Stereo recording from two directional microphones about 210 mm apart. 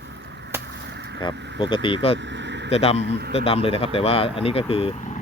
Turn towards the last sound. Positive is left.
turn(degrees=25)  # may be behind; listen again after turning